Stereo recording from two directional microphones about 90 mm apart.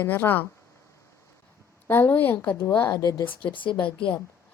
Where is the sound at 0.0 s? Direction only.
25° left (ahead or behind).